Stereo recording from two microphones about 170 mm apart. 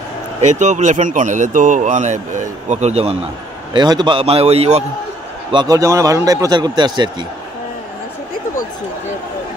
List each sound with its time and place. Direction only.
0.4 s a man's voice: 45° right (ahead or behind)
3.7 s a man's voice: 25° right (ahead or behind)
5.5 s a man's voice: 25° right (ahead or behind)